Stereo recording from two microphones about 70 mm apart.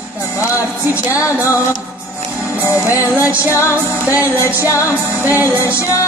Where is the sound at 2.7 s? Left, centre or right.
Left.